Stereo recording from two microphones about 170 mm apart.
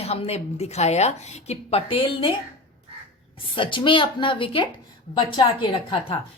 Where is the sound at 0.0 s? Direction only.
35° left (ahead or behind).